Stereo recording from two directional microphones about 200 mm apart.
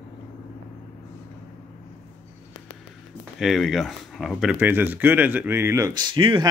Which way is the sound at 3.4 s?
Centre (ahead or behind).